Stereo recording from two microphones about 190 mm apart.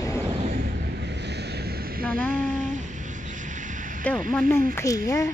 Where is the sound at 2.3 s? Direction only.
45° right (ahead or behind).